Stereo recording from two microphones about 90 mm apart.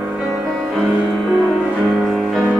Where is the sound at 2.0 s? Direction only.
Centre (ahead or behind).